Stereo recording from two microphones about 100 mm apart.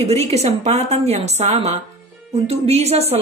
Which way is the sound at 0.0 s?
90° right.